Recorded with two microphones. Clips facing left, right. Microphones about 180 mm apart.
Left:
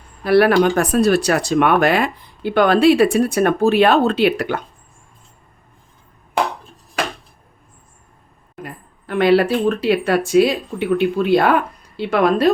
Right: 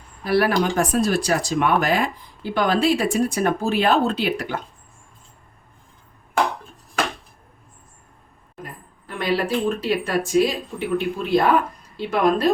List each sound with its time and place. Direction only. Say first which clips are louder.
0.3 s speech: left 6 dB; 65° left (ahead or behind)
8.6 s speech: left 5 dB; 70° left (ahead or behind)